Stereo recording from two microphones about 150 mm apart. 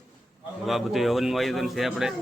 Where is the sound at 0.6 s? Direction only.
Centre (ahead or behind).